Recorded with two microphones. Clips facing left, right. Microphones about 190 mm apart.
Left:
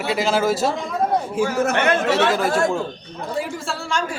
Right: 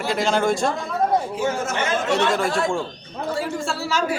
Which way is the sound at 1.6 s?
65° left (ahead or behind).